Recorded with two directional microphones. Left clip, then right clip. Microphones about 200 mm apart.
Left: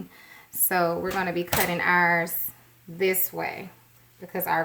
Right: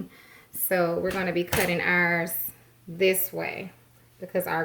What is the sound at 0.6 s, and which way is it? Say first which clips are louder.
Speech: even; 35° left (ahead or behind).